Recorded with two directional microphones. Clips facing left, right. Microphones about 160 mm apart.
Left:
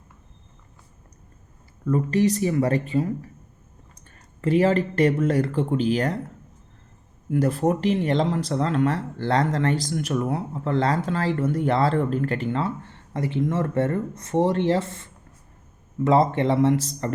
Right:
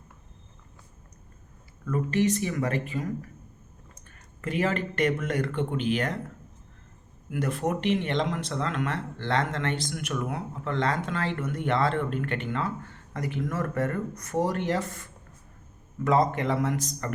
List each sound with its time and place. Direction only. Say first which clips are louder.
1.8 s speech: left 5 dB; 35° left (ahead or behind)
7.3 s speech: left 7 dB; 35° left (ahead or behind)